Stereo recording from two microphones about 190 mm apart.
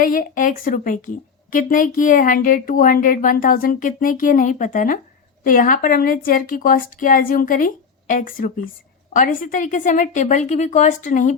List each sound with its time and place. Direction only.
0.0 s a woman's voice: 45° left (ahead or behind)